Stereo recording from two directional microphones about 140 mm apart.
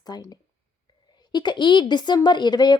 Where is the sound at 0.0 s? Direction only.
30° left (ahead or behind).